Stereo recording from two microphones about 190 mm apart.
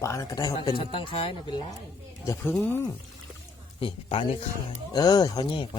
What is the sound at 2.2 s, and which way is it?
Speech, 15° left (ahead or behind).